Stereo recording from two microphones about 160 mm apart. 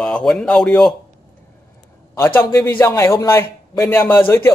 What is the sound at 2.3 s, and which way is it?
A man's voice, 15° left (ahead or behind).